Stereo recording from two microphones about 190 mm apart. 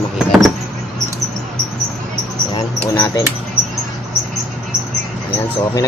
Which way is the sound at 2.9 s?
20° left (ahead or behind).